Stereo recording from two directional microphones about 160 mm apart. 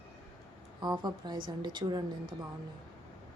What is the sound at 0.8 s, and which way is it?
A woman's voice, 25° right (ahead or behind).